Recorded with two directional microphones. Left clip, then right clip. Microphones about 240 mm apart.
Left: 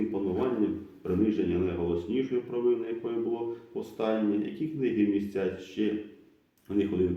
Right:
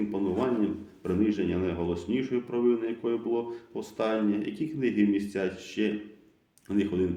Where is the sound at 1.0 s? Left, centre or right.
Right.